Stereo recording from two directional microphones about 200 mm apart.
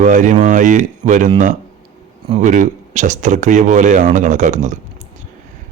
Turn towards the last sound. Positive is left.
turn(degrees=-35)  # may be behind; listen again after turning